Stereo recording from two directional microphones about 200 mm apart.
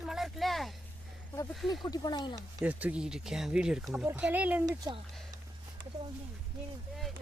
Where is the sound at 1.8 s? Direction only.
20° left (ahead or behind).